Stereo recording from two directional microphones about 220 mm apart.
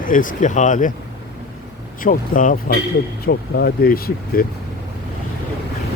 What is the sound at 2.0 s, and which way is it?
Speech, 35° left (ahead or behind).